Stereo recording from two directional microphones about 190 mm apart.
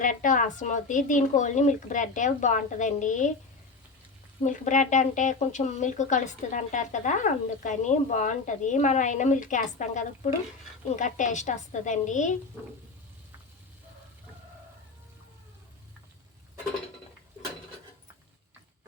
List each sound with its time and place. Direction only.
0.0 s speech: 45° left (ahead or behind)
4.4 s speech: 40° left (ahead or behind)